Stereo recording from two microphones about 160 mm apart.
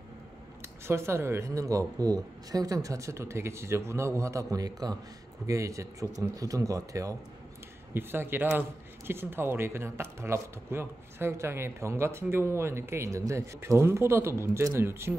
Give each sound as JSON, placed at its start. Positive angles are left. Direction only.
{"t": 0.8, "sound": "a man's voice", "side_deg": -15}